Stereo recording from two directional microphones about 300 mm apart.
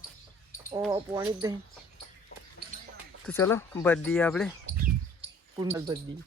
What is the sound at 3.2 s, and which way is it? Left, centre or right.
Speech, centre.